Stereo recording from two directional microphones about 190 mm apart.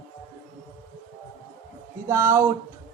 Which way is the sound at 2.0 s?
15° right (ahead or behind).